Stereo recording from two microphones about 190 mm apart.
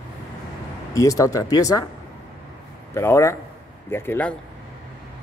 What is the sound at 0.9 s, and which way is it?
Speech, 15° left (ahead or behind).